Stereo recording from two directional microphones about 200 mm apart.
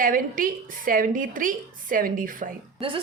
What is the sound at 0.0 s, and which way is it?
A woman's voice, 45° right (ahead or behind).